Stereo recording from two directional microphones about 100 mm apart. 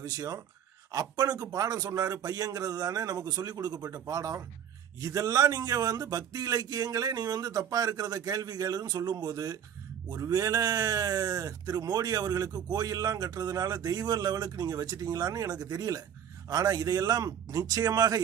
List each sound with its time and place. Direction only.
0.0 s speech: 35° right (ahead or behind)